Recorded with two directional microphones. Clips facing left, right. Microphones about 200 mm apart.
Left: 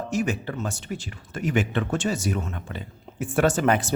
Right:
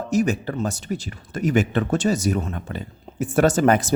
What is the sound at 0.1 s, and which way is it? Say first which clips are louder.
Speech: right 6 dB; 40° right (ahead or behind).